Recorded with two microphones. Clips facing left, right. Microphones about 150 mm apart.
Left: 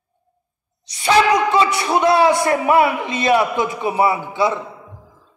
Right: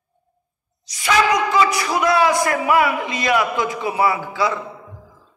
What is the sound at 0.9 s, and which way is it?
A man's voice, 30° left (ahead or behind).